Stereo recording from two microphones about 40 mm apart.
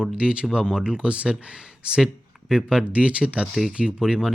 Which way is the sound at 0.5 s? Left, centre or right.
Centre.